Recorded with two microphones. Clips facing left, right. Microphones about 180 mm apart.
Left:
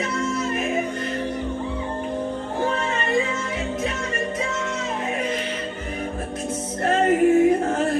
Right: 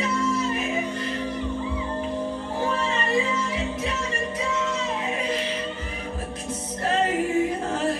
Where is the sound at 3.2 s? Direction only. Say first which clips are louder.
Even; 55° left (ahead or behind).